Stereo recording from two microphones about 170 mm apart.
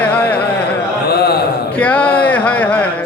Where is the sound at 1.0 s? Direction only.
70° left (ahead or behind).